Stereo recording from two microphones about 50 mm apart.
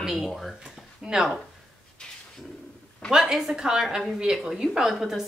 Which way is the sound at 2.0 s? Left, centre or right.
Centre.